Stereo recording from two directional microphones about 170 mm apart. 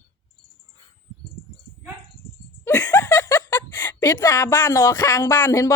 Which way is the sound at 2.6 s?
10° left (ahead or behind).